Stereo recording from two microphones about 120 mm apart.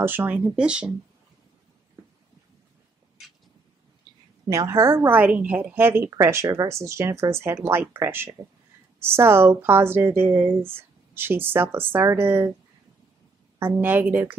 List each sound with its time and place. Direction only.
0.0 s speech: 15° right (ahead or behind)
4.5 s a woman's voice: 25° right (ahead or behind)
13.6 s speech: 15° right (ahead or behind)